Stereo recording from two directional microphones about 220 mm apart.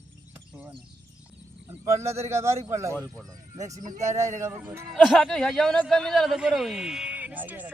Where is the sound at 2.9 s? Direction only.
5° left (ahead or behind).